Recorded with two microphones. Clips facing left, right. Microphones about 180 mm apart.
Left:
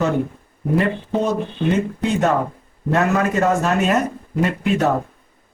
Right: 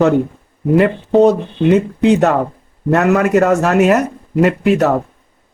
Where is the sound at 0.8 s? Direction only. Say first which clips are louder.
Right 11 dB; 70° right (ahead or behind).